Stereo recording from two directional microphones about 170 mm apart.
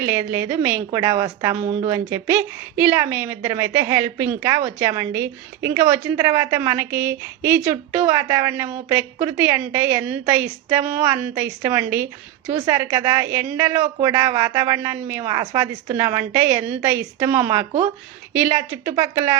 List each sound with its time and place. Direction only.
0.0 s a woman's voice: 15° right (ahead or behind)